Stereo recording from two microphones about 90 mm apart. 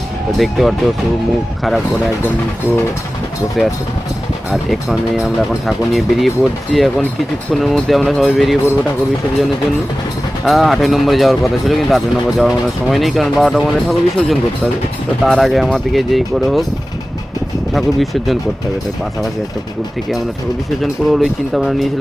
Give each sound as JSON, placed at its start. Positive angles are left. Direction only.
{"t": 0.3, "sound": "speech", "side_deg": 0}
{"t": 3.6, "sound": "speech", "side_deg": 0}
{"t": 10.4, "sound": "speech", "side_deg": 0}
{"t": 17.7, "sound": "speech", "side_deg": 0}
{"t": 20.8, "sound": "speech", "side_deg": -5}